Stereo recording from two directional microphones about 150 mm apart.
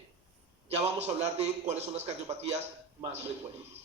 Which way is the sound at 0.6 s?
45° right (ahead or behind).